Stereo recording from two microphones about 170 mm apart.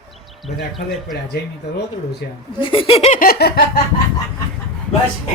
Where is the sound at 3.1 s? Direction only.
60° left (ahead or behind).